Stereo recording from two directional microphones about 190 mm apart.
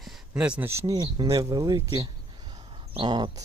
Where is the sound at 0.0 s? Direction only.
5° right (ahead or behind).